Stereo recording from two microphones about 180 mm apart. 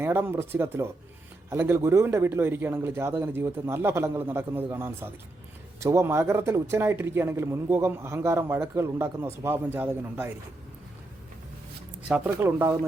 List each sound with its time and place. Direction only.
0.0 s speech: 10° right (ahead or behind)
12.0 s speech: 10° right (ahead or behind)